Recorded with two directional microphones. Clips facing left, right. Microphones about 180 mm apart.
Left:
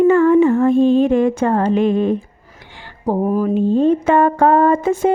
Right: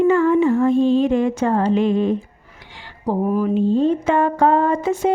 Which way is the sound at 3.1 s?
40° left (ahead or behind).